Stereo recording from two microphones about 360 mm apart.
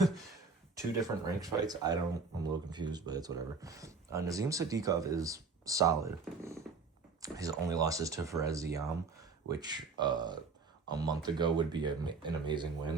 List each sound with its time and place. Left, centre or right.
0.8 s speech: centre